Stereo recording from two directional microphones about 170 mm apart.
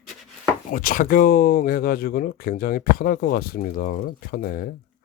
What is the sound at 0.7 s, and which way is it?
Speech, 55° left (ahead or behind).